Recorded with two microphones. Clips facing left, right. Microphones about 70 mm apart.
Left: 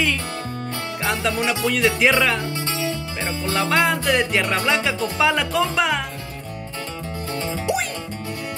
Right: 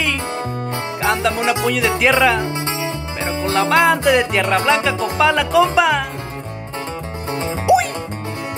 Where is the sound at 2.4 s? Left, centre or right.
Right.